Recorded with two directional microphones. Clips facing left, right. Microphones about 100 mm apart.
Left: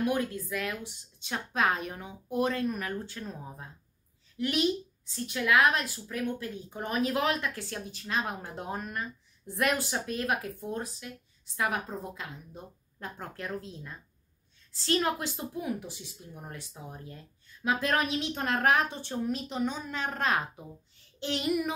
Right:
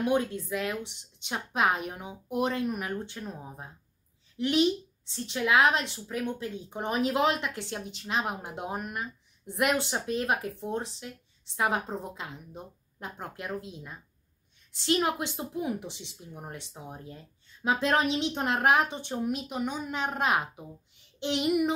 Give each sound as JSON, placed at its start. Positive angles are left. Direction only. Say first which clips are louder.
{"t": 0.0, "sound": "a woman's voice", "louder": "right 2 dB", "side_deg": -25}